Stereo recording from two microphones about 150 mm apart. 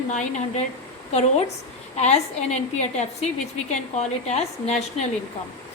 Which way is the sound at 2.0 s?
50° left (ahead or behind).